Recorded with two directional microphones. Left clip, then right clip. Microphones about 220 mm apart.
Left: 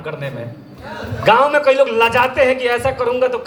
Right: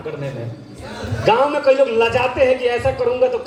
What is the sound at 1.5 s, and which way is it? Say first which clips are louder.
A man's voice: left 2 dB; 15° left (ahead or behind).